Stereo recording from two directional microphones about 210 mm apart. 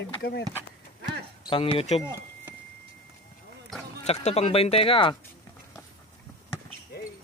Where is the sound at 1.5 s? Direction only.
25° left (ahead or behind).